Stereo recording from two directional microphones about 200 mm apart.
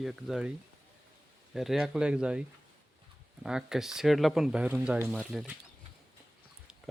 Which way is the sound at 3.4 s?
5° right (ahead or behind).